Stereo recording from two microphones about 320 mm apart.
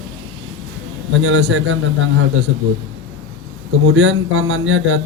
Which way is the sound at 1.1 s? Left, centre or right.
Right.